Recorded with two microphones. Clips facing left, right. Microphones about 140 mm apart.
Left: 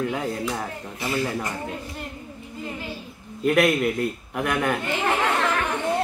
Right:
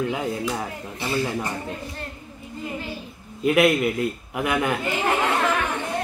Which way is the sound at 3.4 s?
5° right (ahead or behind).